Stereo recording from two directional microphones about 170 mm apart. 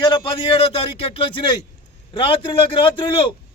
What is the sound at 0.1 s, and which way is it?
A man's voice, 30° left (ahead or behind).